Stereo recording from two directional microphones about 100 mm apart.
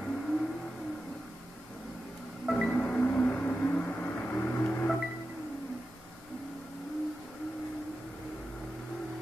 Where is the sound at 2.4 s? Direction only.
10° left (ahead or behind).